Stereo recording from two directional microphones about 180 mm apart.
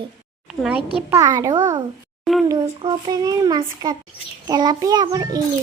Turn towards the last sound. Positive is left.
turn(degrees=-20)  # may be behind; listen again after turning